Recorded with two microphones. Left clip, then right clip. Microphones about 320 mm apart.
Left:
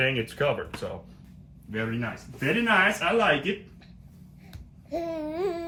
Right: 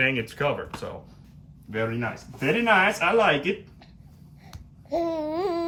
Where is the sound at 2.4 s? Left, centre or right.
Right.